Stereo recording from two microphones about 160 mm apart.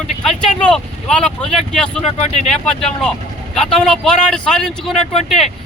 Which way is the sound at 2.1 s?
45° left (ahead or behind).